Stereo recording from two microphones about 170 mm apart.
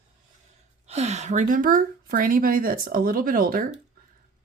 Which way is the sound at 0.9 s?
40° right (ahead or behind).